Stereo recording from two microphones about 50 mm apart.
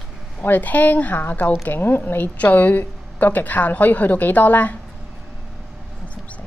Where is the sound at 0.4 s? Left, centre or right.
Left.